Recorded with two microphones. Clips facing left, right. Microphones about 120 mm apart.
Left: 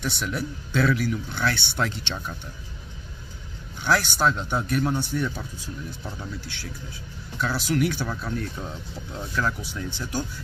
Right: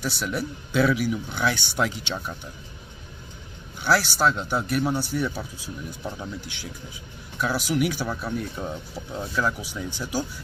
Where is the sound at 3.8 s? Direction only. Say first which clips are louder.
Right 1 dB; 5° right (ahead or behind).